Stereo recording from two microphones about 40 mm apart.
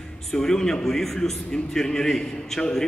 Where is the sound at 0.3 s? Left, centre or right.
Centre.